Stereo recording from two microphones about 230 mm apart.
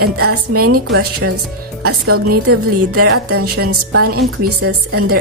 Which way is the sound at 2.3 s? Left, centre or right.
Right.